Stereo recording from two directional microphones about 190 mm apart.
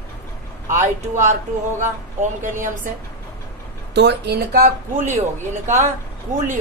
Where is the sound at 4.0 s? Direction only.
60° right (ahead or behind).